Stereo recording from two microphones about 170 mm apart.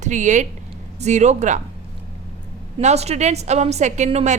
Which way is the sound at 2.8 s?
40° right (ahead or behind).